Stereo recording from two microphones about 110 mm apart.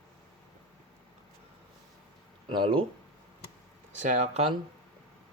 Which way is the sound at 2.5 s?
50° right (ahead or behind).